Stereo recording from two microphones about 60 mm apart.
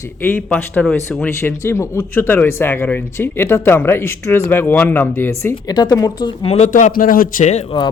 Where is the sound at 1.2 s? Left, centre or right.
Left.